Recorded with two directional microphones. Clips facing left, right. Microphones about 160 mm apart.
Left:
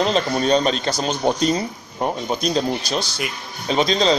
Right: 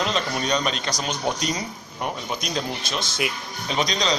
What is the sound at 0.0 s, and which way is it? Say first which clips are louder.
A man's voice: left 6 dB; 35° left (ahead or behind).